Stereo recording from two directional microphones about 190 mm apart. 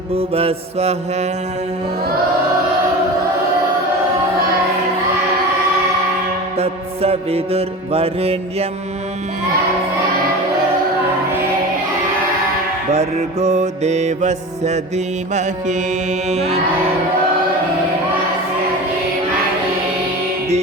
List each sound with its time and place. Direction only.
0.1 s mantra: 30° right (ahead or behind)
6.6 s mantra: 30° right (ahead or behind)
12.9 s mantra: 35° right (ahead or behind)